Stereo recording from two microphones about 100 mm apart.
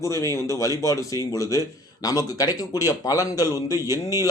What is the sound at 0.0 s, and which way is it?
Speech, 30° left (ahead or behind).